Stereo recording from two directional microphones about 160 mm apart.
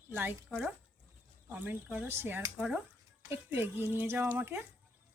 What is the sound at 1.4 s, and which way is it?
Speech, 10° right (ahead or behind).